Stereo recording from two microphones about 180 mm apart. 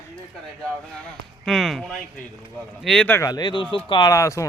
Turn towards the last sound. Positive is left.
turn(degrees=15)  # may be behind; listen again after turning